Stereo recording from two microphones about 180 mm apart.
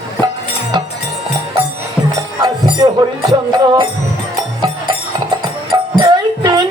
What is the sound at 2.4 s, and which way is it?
Music, 25° right (ahead or behind).